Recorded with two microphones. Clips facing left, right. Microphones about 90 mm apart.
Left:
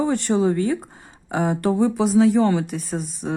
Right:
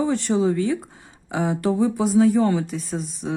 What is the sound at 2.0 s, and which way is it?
Speech, 80° left.